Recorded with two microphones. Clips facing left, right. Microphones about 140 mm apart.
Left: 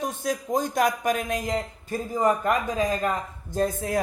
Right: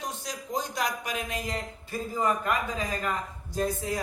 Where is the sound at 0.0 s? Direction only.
50° left (ahead or behind).